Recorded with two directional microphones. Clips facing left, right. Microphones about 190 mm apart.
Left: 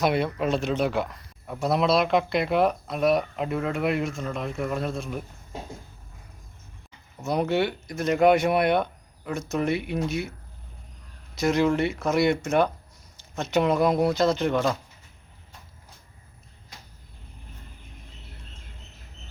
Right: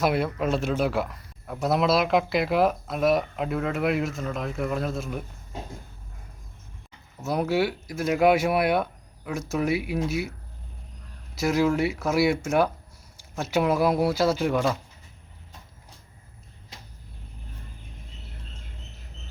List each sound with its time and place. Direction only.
0.0 s speech: centre (ahead or behind)
7.2 s speech: 5° right (ahead or behind)
11.3 s speech: 5° right (ahead or behind)